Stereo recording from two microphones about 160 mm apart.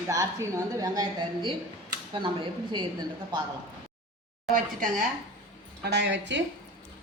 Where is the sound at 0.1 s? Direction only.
20° right (ahead or behind).